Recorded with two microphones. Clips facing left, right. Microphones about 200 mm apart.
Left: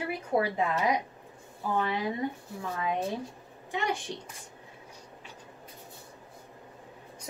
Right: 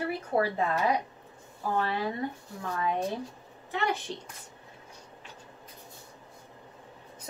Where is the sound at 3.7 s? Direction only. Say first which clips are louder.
Right 1 dB; 15° left (ahead or behind).